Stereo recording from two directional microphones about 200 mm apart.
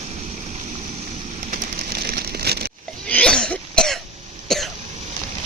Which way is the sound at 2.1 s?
50° right (ahead or behind).